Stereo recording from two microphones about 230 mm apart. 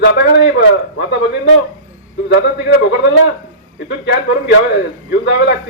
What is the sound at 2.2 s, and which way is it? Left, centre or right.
A man's voice, left.